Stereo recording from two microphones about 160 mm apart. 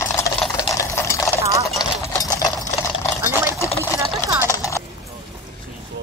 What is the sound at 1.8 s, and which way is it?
Sewing machine, 25° left (ahead or behind).